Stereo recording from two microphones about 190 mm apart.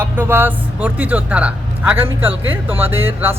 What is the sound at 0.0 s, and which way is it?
Speech, 10° right (ahead or behind).